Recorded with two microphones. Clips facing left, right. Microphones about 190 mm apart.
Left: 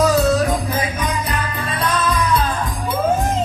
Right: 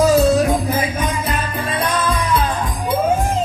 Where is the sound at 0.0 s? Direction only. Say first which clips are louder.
Right 2 dB; 20° right (ahead or behind).